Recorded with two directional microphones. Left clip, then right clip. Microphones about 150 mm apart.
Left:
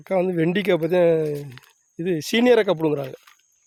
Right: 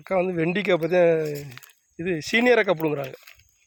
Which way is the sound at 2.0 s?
35° left (ahead or behind).